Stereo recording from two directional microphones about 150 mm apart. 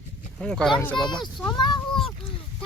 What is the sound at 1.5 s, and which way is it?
Speech, 30° left (ahead or behind).